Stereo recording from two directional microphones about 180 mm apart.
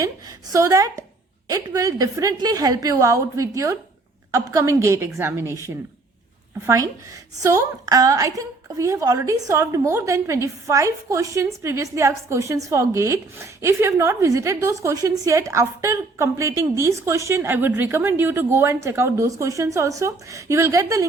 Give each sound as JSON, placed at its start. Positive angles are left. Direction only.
{"t": 0.0, "sound": "a woman's voice", "side_deg": -20}
{"t": 7.4, "sound": "a woman's voice", "side_deg": -20}